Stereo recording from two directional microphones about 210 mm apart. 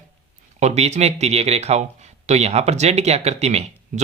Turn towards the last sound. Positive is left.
turn(degrees=-30)  # may be behind; listen again after turning